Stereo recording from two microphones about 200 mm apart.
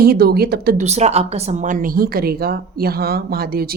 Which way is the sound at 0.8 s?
35° right (ahead or behind).